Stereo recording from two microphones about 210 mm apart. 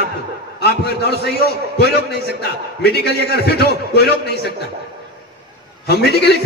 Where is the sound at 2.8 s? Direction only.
50° left (ahead or behind).